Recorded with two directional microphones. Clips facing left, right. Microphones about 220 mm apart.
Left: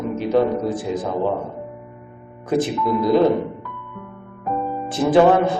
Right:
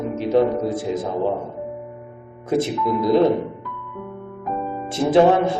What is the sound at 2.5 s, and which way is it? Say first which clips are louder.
Speech: even; 25° right (ahead or behind).